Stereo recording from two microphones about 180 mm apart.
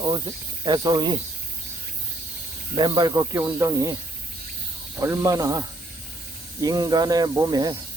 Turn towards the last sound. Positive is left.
turn(degrees=-20)  # may be behind; listen again after turning